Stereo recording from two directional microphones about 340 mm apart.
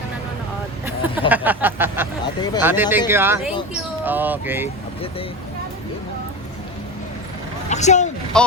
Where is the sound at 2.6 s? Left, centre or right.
Centre.